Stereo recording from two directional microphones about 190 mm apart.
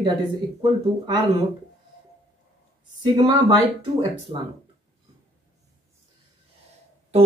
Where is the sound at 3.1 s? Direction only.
30° right (ahead or behind).